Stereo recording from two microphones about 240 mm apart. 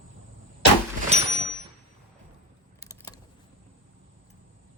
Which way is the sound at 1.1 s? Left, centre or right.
Right.